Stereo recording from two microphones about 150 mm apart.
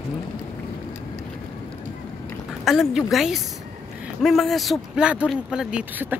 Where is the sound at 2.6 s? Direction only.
Centre (ahead or behind).